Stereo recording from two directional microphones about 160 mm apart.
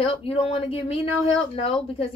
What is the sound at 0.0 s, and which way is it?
A woman's voice, 35° left (ahead or behind).